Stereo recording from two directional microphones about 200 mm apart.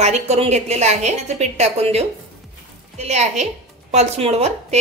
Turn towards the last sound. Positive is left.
turn(degrees=-30)  # may be behind; listen again after turning